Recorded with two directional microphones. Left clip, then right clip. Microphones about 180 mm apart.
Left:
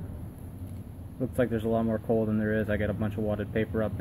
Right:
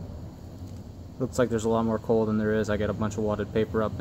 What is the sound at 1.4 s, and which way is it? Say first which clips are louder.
Speech: right 3 dB; 15° right (ahead or behind).